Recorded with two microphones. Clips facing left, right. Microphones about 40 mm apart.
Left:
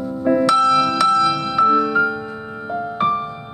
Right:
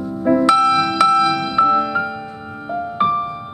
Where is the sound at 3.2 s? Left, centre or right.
Centre.